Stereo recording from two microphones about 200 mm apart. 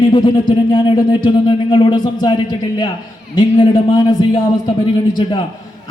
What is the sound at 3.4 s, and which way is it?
Speech, 20° left (ahead or behind).